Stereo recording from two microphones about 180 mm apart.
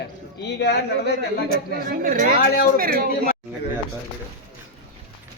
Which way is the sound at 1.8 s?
50° right (ahead or behind).